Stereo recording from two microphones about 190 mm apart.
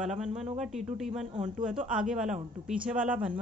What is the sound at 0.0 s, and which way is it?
A woman's voice, centre (ahead or behind).